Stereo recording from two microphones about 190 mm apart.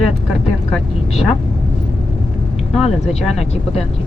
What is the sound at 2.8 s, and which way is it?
Speech, 35° left (ahead or behind).